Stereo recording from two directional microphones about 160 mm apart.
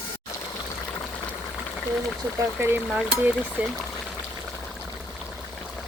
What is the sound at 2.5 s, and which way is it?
Frying, 10° right (ahead or behind).